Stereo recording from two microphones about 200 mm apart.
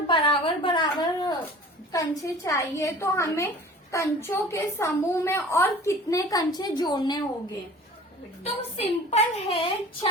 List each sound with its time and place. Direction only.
0.1 s a sound: 25° left (ahead or behind)
1.9 s a woman's voice: 15° left (ahead or behind)
8.4 s a woman's voice: 30° left (ahead or behind)